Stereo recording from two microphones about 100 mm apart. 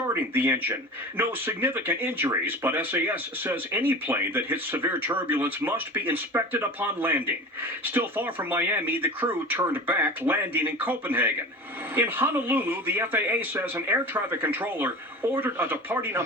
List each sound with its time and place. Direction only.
0.1 s speech: 25° right (ahead or behind)